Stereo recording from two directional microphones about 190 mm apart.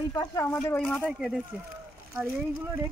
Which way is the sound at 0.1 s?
20° left (ahead or behind).